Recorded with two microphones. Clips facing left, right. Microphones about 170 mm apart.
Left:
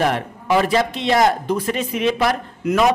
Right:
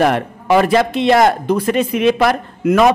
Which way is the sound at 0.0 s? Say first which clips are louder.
Right 5 dB; 65° right (ahead or behind).